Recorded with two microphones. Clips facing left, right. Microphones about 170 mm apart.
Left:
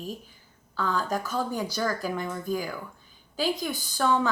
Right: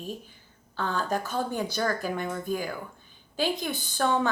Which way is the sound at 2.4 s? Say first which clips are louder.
Even; 25° right (ahead or behind).